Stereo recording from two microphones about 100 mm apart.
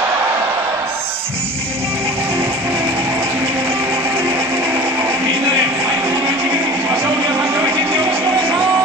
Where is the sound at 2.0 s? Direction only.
25° right (ahead or behind).